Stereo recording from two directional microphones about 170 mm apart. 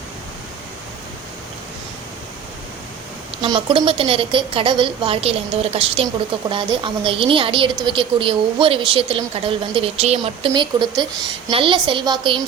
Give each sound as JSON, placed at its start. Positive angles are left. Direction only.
{"t": 3.4, "sound": "a woman's voice", "side_deg": -30}